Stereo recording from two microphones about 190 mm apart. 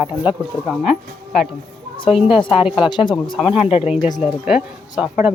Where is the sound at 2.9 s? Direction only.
25° left (ahead or behind).